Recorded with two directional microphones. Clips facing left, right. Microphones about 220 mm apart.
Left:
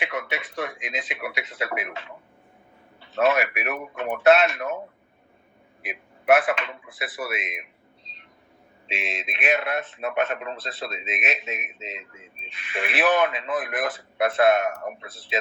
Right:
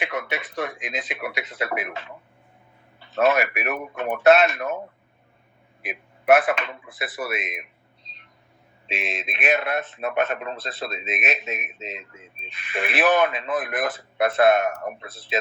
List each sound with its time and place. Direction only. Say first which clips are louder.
0.0 s a man's voice: right 1 dB; 40° right (ahead or behind)
3.2 s a man's voice: right 1 dB; 40° right (ahead or behind)
5.8 s a man's voice: right 1 dB; 40° right (ahead or behind)
8.9 s a man's voice: right 2 dB; 40° right (ahead or behind)